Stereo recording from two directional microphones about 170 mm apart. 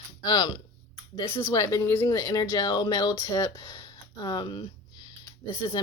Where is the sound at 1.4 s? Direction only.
20° left (ahead or behind).